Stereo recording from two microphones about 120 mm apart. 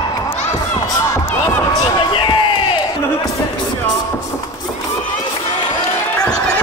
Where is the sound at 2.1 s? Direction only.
45° left (ahead or behind).